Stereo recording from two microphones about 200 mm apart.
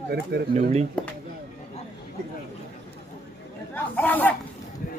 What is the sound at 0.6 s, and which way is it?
Speech, 35° right (ahead or behind).